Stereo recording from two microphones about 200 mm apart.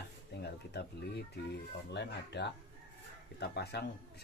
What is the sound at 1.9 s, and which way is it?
Speech, 60° left (ahead or behind).